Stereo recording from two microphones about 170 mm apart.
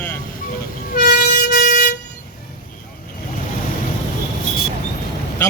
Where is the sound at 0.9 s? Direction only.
65° left (ahead or behind).